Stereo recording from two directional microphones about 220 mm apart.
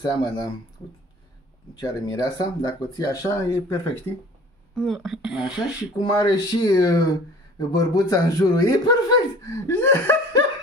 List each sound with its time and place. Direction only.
0.0 s speech: 20° left (ahead or behind)
1.8 s speech: 15° left (ahead or behind)
4.7 s speech: centre (ahead or behind)
5.9 s speech: 15° left (ahead or behind)